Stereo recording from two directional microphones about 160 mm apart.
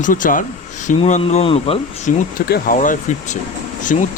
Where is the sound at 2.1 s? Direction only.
50° left (ahead or behind).